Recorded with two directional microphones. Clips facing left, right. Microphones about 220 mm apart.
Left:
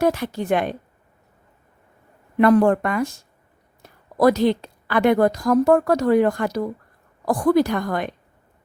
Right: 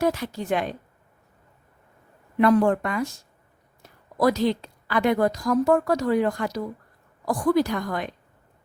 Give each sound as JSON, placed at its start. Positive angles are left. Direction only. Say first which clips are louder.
{"t": 0.0, "sound": "a woman's voice", "louder": "left 4 dB", "side_deg": 60}
{"t": 2.4, "sound": "a woman's voice", "louder": "left 4 dB", "side_deg": 55}
{"t": 4.2, "sound": "a woman's voice", "louder": "left 5 dB", "side_deg": 55}